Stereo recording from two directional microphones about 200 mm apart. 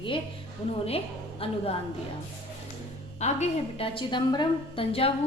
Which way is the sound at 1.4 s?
30° left (ahead or behind).